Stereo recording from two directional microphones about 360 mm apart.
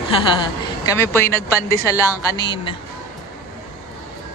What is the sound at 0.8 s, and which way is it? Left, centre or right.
Speech, centre.